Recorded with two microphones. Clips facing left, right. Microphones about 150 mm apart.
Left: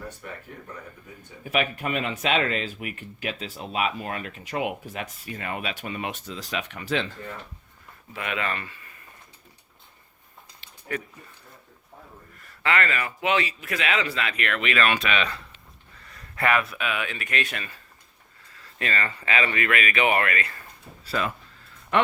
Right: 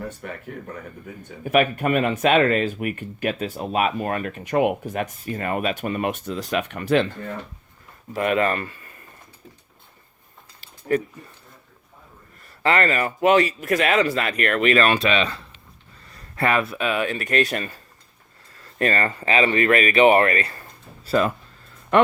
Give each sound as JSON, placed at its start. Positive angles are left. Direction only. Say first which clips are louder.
{"t": 0.2, "sound": "speech", "louder": "right 5 dB", "side_deg": -55}
{"t": 1.5, "sound": "speech", "louder": "right 7 dB", "side_deg": -50}
{"t": 8.1, "sound": "speech", "louder": "right 9 dB", "side_deg": -45}
{"t": 10.6, "sound": "a sound", "louder": "right 10 dB", "side_deg": -40}
{"t": 12.6, "sound": "speech", "louder": "right 5 dB", "side_deg": -35}
{"t": 18.5, "sound": "a sound", "louder": "right 7 dB", "side_deg": -45}
{"t": 19.3, "sound": "speech", "louder": "right 7 dB", "side_deg": -30}